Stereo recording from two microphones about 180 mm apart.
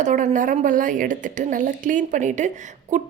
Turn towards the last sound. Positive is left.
turn(degrees=-45)  # may be behind; listen again after turning